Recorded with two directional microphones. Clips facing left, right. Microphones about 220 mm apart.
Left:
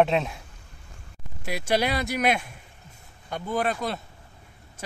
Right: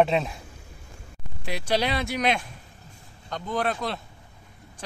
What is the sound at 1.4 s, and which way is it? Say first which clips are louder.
Speech: left 1 dB; 5° left (ahead or behind).